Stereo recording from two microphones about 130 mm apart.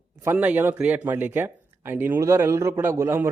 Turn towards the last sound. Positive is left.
turn(degrees=-20)  # may be behind; listen again after turning